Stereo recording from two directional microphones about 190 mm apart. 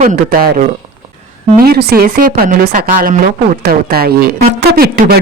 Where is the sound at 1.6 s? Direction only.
55° right (ahead or behind).